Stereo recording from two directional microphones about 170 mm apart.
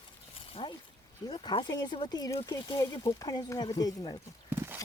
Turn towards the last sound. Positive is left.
turn(degrees=-15)  # may be behind; listen again after turning